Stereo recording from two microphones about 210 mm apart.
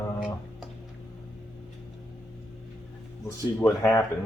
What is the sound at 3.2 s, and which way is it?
Speech, 15° left (ahead or behind).